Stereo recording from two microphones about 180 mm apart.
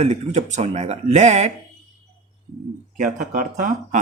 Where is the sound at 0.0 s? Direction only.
40° right (ahead or behind).